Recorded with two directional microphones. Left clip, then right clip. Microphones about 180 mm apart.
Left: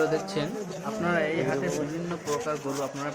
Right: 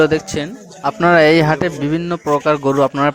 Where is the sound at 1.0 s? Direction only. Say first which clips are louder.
Right 17 dB; 60° right (ahead or behind).